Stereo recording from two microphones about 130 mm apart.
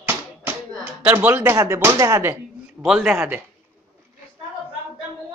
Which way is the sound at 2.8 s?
5° right (ahead or behind).